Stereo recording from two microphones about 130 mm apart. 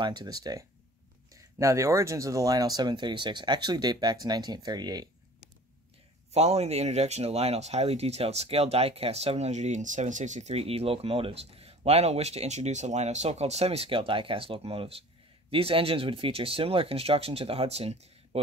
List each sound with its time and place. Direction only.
0.0 s speech: 35° right (ahead or behind)
6.3 s speech: 55° right (ahead or behind)